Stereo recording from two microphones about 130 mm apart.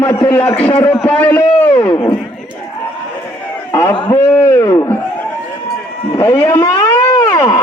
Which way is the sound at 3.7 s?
20° left (ahead or behind).